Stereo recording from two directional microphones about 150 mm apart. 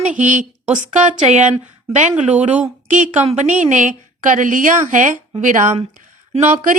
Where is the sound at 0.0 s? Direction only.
55° right (ahead or behind).